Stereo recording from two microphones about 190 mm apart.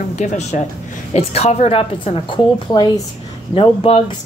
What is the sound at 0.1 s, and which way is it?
Speech, 40° left (ahead or behind).